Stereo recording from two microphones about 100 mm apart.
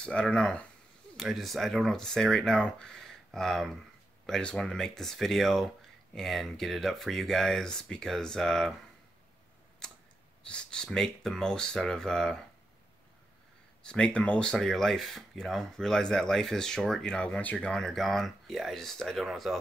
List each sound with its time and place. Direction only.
0.0 s speech: 10° left (ahead or behind)
9.8 s a sound: 5° left (ahead or behind)
10.5 s speech: 10° left (ahead or behind)
13.8 s speech: 10° left (ahead or behind)